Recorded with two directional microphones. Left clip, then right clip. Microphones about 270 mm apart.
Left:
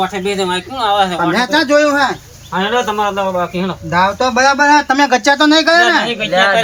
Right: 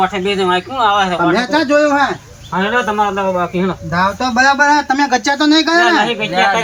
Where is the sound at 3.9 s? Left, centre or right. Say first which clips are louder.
Left 2 dB; centre.